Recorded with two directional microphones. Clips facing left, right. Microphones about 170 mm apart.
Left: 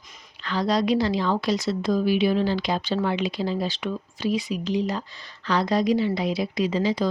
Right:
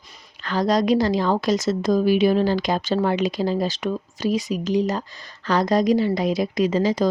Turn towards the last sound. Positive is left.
turn(degrees=-45)  # may be behind; listen again after turning